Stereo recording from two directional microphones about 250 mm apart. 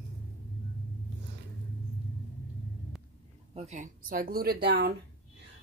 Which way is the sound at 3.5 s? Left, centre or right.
Right.